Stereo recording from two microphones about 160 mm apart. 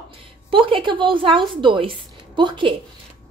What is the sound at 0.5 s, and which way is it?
Speech, 35° right (ahead or behind).